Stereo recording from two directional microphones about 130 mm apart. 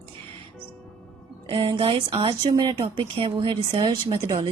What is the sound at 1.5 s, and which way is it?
Speech, 40° right (ahead or behind).